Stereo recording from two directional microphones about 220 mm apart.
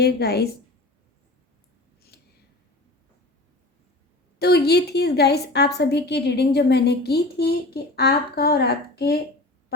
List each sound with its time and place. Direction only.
0.0 s a woman's voice: 45° left (ahead or behind)
2.1 s a sound: 45° left (ahead or behind)
4.4 s a woman's voice: 45° left (ahead or behind)